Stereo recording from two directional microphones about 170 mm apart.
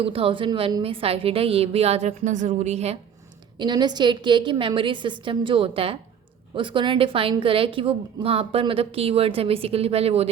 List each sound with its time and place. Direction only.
0.0 s a woman's voice: 30° right (ahead or behind)
3.6 s a woman's voice: 25° right (ahead or behind)